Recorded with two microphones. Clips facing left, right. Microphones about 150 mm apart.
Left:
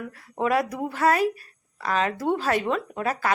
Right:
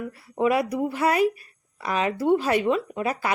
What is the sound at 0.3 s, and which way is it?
Speech, 5° right (ahead or behind).